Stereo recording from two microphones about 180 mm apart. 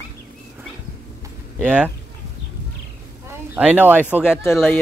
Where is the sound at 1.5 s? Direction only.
10° right (ahead or behind).